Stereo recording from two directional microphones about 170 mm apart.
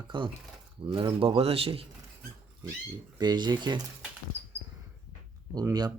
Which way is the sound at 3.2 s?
25° right (ahead or behind).